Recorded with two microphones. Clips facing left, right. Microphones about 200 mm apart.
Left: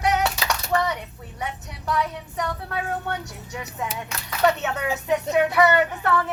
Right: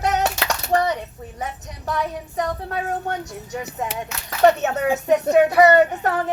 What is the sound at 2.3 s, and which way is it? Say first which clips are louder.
Speech: right 3 dB; 35° right (ahead or behind).